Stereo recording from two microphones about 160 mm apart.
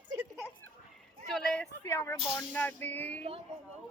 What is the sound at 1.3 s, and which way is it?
Speech, 5° left (ahead or behind).